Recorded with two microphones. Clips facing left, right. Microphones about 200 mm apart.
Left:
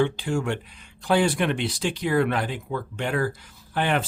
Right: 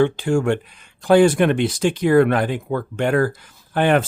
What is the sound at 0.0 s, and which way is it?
Speech, 50° right (ahead or behind).